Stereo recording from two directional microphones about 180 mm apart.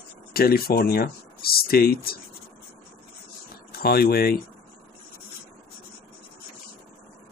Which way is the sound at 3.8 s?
55° left (ahead or behind).